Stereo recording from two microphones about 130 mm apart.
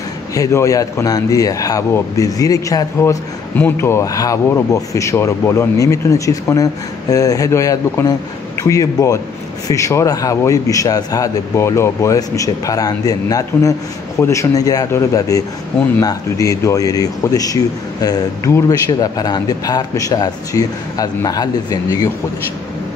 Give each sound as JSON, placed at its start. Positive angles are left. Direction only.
{"t": 0.3, "sound": "speech", "side_deg": 25}
{"t": 3.5, "sound": "speech", "side_deg": 15}